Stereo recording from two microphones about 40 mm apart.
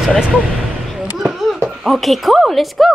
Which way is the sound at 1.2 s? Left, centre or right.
Centre.